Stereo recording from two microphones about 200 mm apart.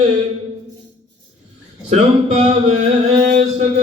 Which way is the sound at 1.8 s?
35° right (ahead or behind).